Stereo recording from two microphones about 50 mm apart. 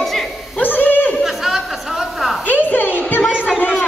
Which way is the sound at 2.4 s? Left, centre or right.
Left.